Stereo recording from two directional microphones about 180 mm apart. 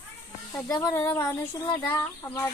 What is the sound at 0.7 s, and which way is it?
Speech, 15° left (ahead or behind).